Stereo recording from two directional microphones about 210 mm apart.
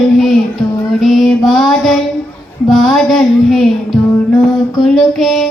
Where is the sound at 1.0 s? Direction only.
Centre (ahead or behind).